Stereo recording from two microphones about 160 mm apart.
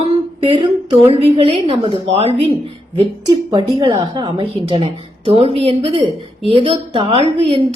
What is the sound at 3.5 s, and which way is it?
A woman's voice, 25° right (ahead or behind).